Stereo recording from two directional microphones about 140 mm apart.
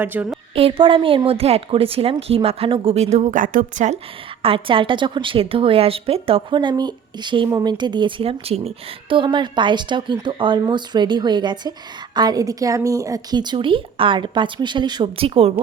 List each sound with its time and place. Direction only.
0.0 s a woman's voice: 15° right (ahead or behind)
0.5 s speech: 40° right (ahead or behind); by 3.9 s 70° right (ahead or behind)
4.4 s a woman's voice: 40° right (ahead or behind)